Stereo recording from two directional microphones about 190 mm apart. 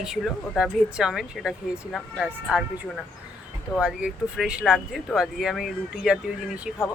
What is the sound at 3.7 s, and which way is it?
Speech, 5° right (ahead or behind).